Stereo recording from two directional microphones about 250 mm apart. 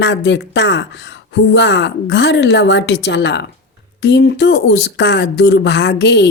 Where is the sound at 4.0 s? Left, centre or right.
Left.